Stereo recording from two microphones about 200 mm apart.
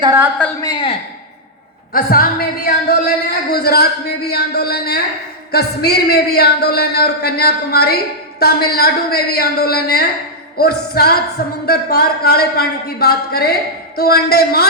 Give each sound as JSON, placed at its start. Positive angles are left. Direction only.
{"t": 0.0, "sound": "a woman's voice", "side_deg": -15}
{"t": 0.6, "sound": "a man's voice", "side_deg": 25}
{"t": 1.9, "sound": "a man's voice", "side_deg": 45}